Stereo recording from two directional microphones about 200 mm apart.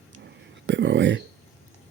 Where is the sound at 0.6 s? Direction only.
65° right (ahead or behind).